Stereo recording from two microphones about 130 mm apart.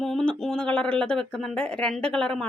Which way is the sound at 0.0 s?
5° left (ahead or behind).